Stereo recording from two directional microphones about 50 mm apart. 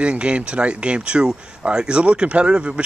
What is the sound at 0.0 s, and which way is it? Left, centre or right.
Speech, right.